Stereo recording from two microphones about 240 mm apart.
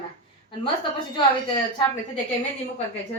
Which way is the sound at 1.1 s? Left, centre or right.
Centre.